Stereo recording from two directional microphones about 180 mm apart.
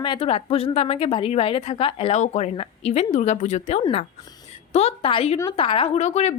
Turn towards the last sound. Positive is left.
turn(degrees=40)  # may be behind; listen again after turning